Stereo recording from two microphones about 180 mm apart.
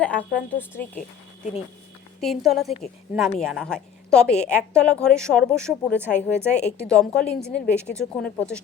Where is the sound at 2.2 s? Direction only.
Centre (ahead or behind).